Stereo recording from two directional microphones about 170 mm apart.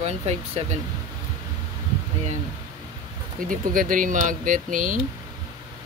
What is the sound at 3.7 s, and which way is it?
Speech, 55° right (ahead or behind).